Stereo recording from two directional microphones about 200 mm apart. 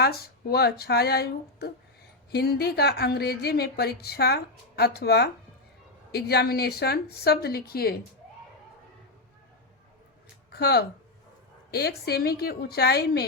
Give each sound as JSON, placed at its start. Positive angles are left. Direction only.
{"t": 0.0, "sound": "speech", "side_deg": 50}
{"t": 10.5, "sound": "speech", "side_deg": 55}